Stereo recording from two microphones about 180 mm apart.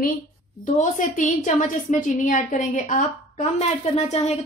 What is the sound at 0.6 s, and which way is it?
A woman's voice, 45° left (ahead or behind).